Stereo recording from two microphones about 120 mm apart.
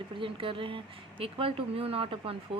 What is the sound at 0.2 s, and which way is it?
Speech, 45° right (ahead or behind).